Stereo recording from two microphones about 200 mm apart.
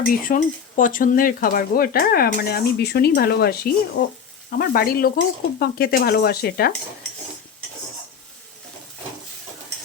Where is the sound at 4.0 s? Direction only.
65° left (ahead or behind).